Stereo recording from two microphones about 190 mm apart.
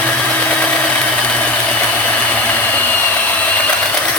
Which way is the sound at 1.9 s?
10° left (ahead or behind).